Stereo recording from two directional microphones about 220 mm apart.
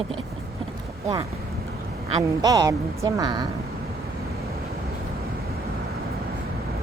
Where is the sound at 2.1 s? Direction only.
20° right (ahead or behind).